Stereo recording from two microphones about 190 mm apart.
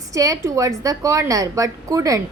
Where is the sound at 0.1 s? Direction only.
15° right (ahead or behind).